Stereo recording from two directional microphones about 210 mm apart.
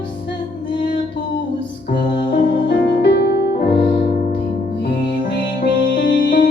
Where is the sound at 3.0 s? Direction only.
50° left (ahead or behind).